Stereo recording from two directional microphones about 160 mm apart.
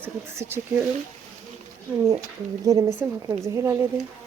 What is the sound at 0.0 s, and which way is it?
Speech, 15° right (ahead or behind).